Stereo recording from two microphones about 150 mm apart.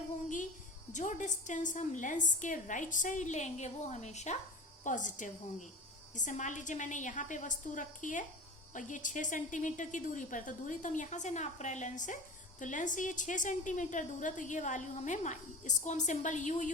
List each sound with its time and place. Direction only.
0.9 s speech: 55° left (ahead or behind)